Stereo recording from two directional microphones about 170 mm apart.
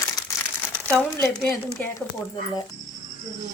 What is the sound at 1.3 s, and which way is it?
Speech, 10° left (ahead or behind).